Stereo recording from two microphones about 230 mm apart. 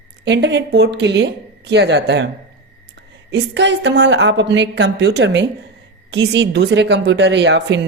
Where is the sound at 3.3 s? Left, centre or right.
Right.